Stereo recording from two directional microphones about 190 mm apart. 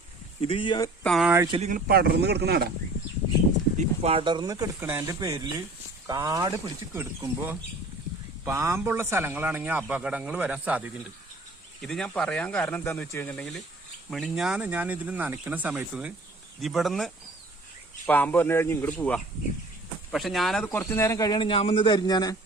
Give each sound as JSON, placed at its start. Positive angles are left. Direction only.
{"t": 0.4, "sound": "a man's voice", "side_deg": 25}
{"t": 1.0, "sound": "speech", "side_deg": 0}
{"t": 1.5, "sound": "speech", "side_deg": -30}
{"t": 1.7, "sound": "speech", "side_deg": -55}
{"t": 3.8, "sound": "speech", "side_deg": -30}
{"t": 14.1, "sound": "speech", "side_deg": 0}
{"t": 20.7, "sound": "a man's voice", "side_deg": 15}